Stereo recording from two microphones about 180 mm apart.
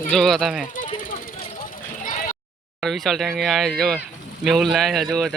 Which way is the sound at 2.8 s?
Centre (ahead or behind).